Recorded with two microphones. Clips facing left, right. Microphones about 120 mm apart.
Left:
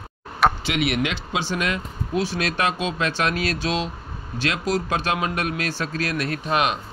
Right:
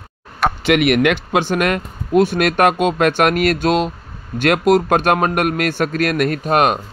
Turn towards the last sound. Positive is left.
turn(degrees=-50)  # may be behind; listen again after turning